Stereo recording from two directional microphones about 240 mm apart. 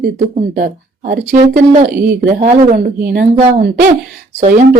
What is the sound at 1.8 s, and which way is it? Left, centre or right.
Speech, right.